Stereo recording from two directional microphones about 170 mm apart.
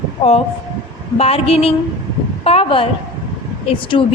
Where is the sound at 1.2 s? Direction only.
35° left (ahead or behind).